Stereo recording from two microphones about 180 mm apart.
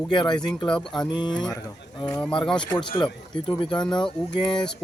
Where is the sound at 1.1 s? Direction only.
25° left (ahead or behind).